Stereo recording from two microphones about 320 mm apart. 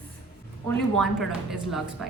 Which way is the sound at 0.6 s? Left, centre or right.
Centre.